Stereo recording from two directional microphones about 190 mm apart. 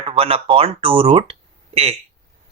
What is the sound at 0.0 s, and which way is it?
Speech, 30° right (ahead or behind).